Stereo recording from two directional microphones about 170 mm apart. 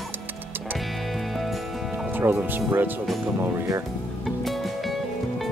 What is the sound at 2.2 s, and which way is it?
Speech, 10° right (ahead or behind).